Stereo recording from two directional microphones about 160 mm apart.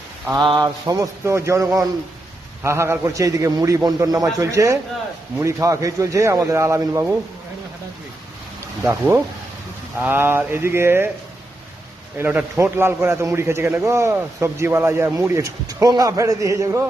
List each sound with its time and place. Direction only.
0.4 s a man's voice: 25° right (ahead or behind)
8.8 s a man's voice: 15° right (ahead or behind)
12.1 s a man's voice: 15° right (ahead or behind)